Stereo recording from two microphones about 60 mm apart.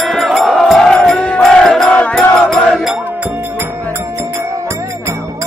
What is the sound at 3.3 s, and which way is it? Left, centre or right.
Music, right.